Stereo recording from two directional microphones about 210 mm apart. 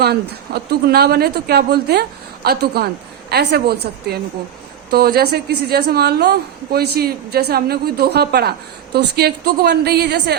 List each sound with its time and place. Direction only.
0.0 s a woman's voice: 50° right (ahead or behind)